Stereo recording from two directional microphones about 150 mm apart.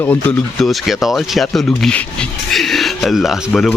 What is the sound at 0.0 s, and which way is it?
Speech, 10° left (ahead or behind).